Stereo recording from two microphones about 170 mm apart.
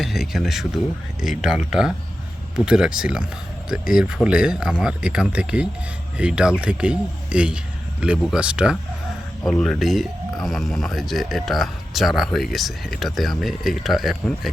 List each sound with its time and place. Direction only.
0.0 s speech: centre (ahead or behind)